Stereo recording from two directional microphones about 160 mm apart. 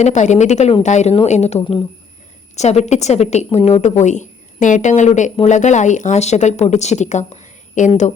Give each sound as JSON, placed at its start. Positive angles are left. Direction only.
{"t": 0.0, "sound": "a woman's voice", "side_deg": 45}